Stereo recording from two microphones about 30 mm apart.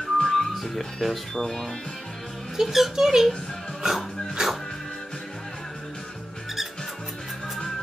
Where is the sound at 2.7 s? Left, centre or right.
Centre.